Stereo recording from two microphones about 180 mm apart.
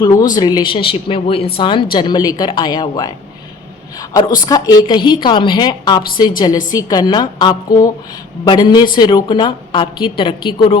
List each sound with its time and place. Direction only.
0.0 s a woman's voice: 20° left (ahead or behind)
4.4 s a woman's voice: 20° left (ahead or behind)